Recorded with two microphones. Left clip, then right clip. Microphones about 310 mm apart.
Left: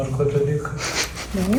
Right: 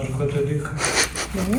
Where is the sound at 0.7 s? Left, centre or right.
Right.